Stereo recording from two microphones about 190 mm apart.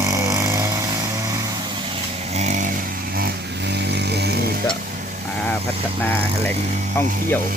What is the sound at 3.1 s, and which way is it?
Motorcycle, 55° right (ahead or behind).